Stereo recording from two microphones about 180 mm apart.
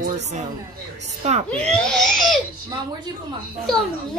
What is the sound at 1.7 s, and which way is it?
Speech, 5° left (ahead or behind).